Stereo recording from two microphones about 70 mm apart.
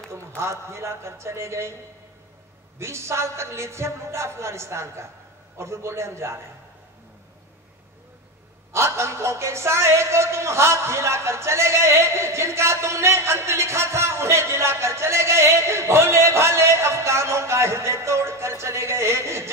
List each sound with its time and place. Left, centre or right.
0.4 s a man's voice: right
2.8 s a man's voice: right
8.7 s a man's voice: right